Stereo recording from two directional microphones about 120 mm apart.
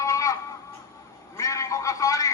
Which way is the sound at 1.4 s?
25° left (ahead or behind).